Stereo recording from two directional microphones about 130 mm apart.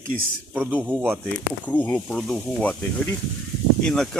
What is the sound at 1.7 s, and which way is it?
Speech, 10° left (ahead or behind).